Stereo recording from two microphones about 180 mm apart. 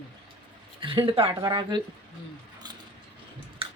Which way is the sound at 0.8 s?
30° right (ahead or behind).